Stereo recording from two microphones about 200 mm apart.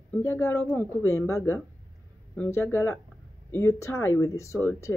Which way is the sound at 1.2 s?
15° left (ahead or behind).